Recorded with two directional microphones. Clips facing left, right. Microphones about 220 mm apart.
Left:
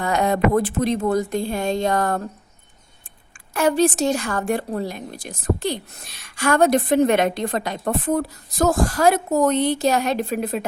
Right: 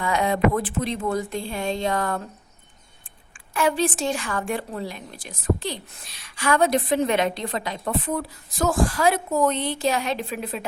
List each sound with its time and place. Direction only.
0.0 s a woman's voice: 45° left (ahead or behind)
3.5 s a woman's voice: 45° left (ahead or behind)